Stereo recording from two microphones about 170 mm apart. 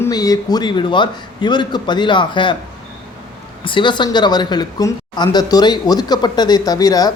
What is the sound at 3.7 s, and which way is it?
A man's voice, 30° left (ahead or behind).